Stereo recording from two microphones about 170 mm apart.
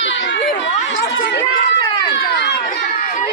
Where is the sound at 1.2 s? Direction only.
90° left.